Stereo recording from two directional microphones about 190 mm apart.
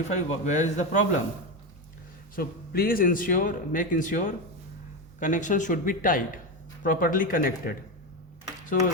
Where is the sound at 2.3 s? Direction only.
50° left (ahead or behind).